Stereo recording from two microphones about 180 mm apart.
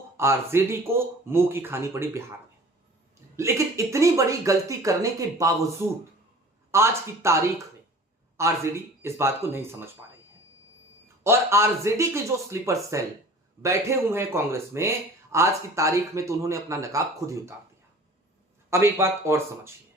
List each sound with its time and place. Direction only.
0.2 s speech: 15° right (ahead or behind)
3.3 s speech: 15° right (ahead or behind)
11.2 s speech: 15° right (ahead or behind)
18.7 s speech: 15° right (ahead or behind)